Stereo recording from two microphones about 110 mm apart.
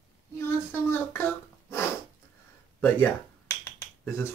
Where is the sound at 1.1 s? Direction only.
25° left (ahead or behind).